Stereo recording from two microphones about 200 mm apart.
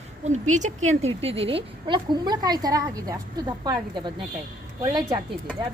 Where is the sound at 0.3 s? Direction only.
40° right (ahead or behind).